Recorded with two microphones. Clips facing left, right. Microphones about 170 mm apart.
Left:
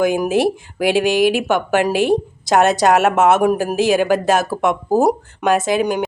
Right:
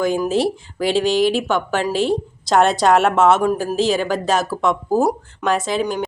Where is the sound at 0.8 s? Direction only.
10° left (ahead or behind).